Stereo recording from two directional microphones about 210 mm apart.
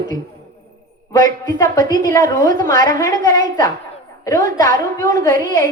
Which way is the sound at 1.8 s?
40° right (ahead or behind).